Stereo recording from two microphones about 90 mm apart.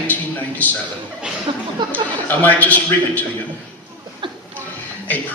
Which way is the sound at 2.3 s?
20° left (ahead or behind).